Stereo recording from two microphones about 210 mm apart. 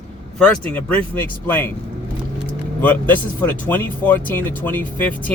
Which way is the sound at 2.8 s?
10° left (ahead or behind).